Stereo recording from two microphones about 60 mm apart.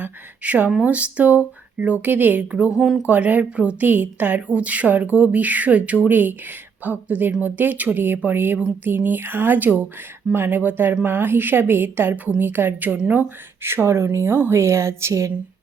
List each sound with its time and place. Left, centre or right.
0.0 s speech: right
2.7 s speech: centre
3.1 s a woman's voice: right